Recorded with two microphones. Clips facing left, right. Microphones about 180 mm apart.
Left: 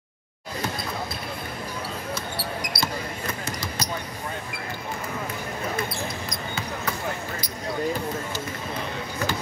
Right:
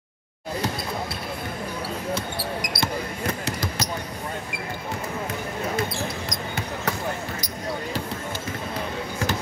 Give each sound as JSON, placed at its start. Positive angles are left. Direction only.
{"t": 3.4, "sound": "basketball bounce", "side_deg": -70}